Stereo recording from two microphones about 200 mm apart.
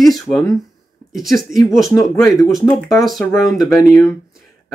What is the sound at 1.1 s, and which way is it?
Speech, centre (ahead or behind).